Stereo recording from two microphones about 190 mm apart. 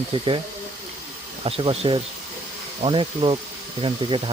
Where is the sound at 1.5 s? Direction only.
30° right (ahead or behind).